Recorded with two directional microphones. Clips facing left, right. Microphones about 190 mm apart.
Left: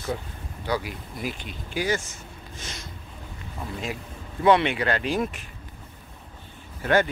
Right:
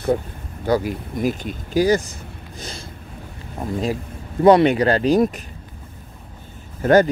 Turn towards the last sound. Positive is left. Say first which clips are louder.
# right 8 dB
turn(degrees=-40)  # may be behind; listen again after turning